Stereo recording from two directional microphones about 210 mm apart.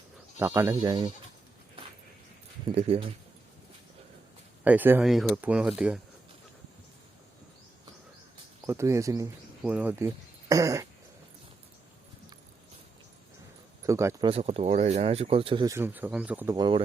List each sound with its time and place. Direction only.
0.3 s speech: 10° right (ahead or behind)
2.7 s speech: 30° right (ahead or behind)
4.6 s speech: 10° right (ahead or behind)
8.6 s speech: 15° right (ahead or behind)
13.8 s speech: 15° right (ahead or behind)
14.3 s speech: 30° right (ahead or behind); by 16.6 s 10° right (ahead or behind)
16.6 s speech: 20° right (ahead or behind)